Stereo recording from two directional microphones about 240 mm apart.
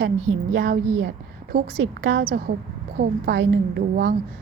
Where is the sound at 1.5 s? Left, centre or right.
Right.